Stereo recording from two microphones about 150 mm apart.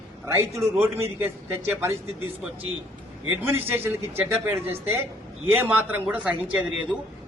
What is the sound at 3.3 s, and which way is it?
A man's voice, 15° right (ahead or behind).